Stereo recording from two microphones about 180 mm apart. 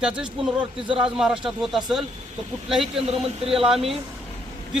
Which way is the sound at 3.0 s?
35° right (ahead or behind).